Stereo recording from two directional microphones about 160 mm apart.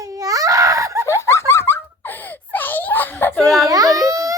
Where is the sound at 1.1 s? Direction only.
15° left (ahead or behind).